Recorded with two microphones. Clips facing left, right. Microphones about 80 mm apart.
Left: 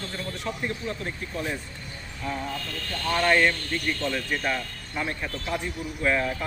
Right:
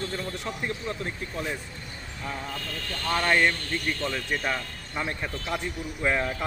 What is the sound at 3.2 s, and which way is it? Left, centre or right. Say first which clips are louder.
Speech: left 2 dB; centre.